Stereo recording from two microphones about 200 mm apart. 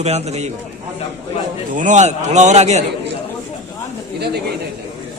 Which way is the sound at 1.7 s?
40° right (ahead or behind).